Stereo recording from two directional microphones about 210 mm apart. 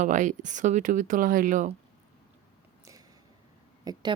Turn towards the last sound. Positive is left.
turn(degrees=-20)  # may be behind; listen again after turning